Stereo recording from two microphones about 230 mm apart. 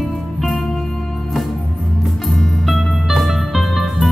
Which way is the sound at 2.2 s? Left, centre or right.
Centre.